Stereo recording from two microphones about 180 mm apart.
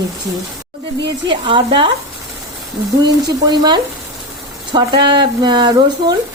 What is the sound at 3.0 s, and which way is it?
Speech, 20° right (ahead or behind).